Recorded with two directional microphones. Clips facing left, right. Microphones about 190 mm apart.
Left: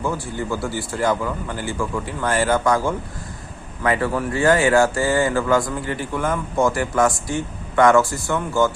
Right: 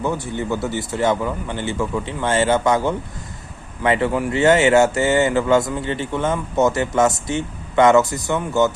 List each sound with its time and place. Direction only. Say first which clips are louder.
0.0 s speech: right 2 dB; 20° right (ahead or behind)